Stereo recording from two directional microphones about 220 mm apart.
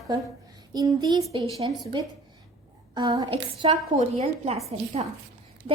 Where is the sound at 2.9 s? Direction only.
20° right (ahead or behind).